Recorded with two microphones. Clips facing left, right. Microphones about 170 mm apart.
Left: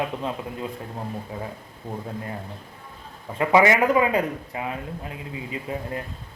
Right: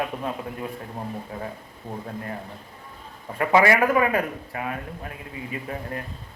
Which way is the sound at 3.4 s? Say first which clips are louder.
Left 1 dB; 20° left (ahead or behind).